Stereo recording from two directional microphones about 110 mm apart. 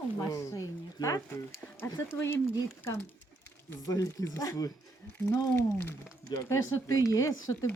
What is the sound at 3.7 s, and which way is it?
Speech, 30° left (ahead or behind).